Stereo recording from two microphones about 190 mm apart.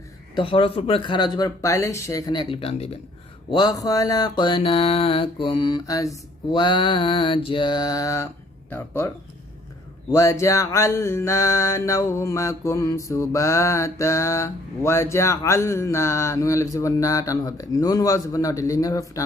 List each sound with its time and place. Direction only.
0.3 s mantra: 25° left (ahead or behind)
3.5 s mantra: 20° left (ahead or behind)